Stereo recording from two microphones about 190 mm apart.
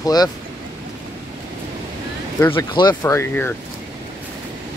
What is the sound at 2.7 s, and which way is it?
Speech, 20° left (ahead or behind).